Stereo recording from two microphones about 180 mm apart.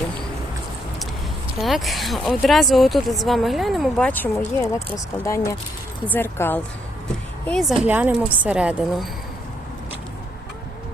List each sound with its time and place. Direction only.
1.5 s speech: centre (ahead or behind)
7.4 s speech: centre (ahead or behind)